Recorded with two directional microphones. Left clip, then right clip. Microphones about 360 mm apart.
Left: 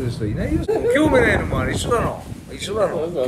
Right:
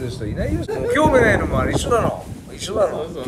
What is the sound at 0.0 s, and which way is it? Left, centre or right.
A man's voice, centre.